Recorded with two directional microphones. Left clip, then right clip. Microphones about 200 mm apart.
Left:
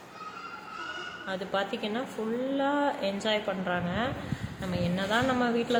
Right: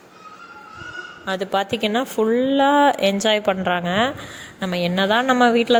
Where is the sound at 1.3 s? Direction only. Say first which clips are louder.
Right 10 dB; 40° right (ahead or behind).